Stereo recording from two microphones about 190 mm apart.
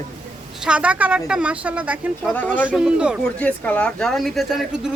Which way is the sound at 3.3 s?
5° left (ahead or behind).